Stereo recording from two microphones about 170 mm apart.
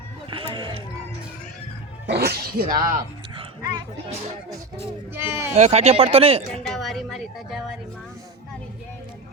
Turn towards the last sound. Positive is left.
turn(degrees=0)  # may be behind; listen again after turning